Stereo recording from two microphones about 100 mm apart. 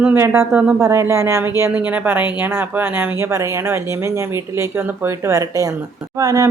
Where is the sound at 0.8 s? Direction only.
30° right (ahead or behind).